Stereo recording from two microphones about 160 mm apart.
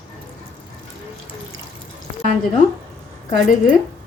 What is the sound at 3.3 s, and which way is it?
Speech, 55° left (ahead or behind).